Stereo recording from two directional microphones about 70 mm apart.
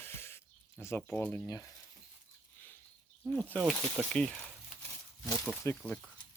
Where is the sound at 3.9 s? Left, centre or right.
Centre.